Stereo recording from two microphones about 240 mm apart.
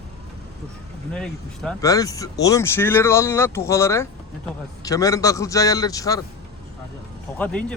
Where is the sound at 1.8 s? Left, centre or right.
Centre.